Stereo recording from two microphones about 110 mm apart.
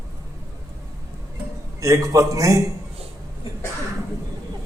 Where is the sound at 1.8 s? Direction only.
30° right (ahead or behind).